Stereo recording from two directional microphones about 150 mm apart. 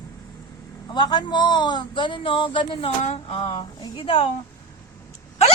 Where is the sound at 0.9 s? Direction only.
30° left (ahead or behind).